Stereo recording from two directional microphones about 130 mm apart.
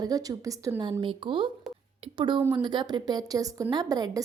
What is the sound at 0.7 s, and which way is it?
A woman's voice, 40° right (ahead or behind).